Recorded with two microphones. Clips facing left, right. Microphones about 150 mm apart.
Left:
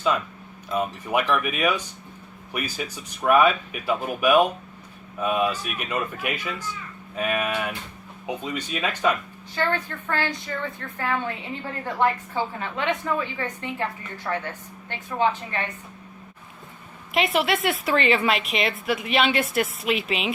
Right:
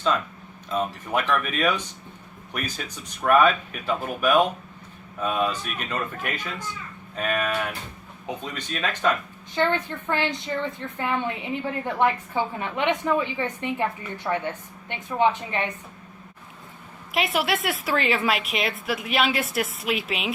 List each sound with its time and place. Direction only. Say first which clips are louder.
0.7 s a woman's voice: left 1 dB; 5° left (ahead or behind)
9.6 s a woman's voice: right 2 dB; 20° right (ahead or behind)
17.1 s a woman's voice: left 2 dB; centre (ahead or behind)